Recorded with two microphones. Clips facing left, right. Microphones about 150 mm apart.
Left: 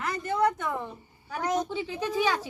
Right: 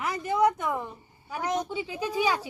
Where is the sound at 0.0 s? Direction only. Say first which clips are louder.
Right 2 dB; 10° right (ahead or behind).